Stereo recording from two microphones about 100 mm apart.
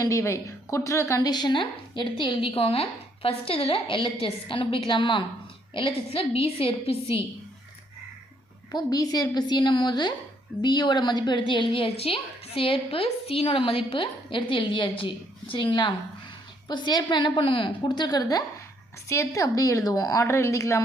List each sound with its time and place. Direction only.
0.0 s a woman's voice: 30° left (ahead or behind)
1.3 s a woman's voice: 45° left (ahead or behind); by 7.3 s 65° left (ahead or behind)
8.7 s a woman's voice: 40° left (ahead or behind)